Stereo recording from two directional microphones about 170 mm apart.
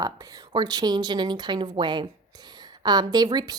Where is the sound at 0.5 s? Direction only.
25° right (ahead or behind).